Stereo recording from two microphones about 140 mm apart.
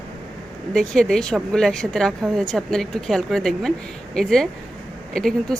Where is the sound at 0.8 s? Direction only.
5° left (ahead or behind).